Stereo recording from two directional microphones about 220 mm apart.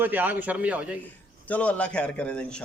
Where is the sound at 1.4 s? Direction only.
5° left (ahead or behind).